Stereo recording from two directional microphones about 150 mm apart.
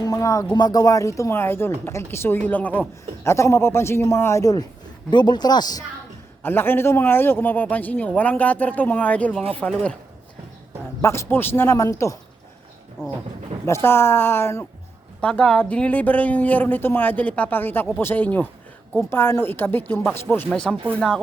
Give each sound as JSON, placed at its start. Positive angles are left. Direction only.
{"t": 0.0, "sound": "a man's voice", "side_deg": 25}
{"t": 6.4, "sound": "a man's voice", "side_deg": 15}
{"t": 11.0, "sound": "a man's voice", "side_deg": 15}
{"t": 13.7, "sound": "a man's voice", "side_deg": 15}